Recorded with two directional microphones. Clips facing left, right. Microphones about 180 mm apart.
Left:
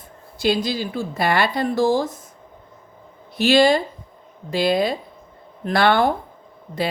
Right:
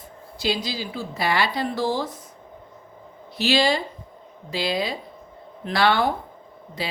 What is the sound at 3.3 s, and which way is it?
A woman's voice, 50° left (ahead or behind).